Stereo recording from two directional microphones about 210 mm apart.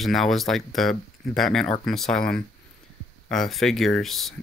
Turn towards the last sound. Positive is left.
turn(degrees=0)  # may be behind; listen again after turning